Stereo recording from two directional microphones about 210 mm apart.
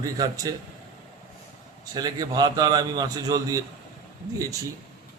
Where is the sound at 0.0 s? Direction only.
15° right (ahead or behind).